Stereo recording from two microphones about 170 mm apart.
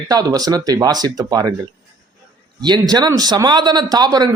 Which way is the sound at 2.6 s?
25° right (ahead or behind).